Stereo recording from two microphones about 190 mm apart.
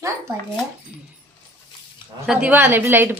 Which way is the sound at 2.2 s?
5° right (ahead or behind).